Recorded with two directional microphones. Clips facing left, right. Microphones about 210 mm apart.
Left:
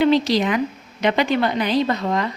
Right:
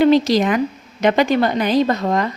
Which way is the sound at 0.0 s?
45° right (ahead or behind).